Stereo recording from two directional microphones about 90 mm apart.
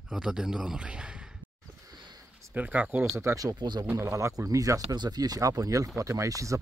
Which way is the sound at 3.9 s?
35° right (ahead or behind).